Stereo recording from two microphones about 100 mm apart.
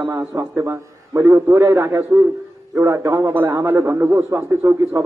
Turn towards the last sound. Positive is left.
turn(degrees=-30)  # may be behind; listen again after turning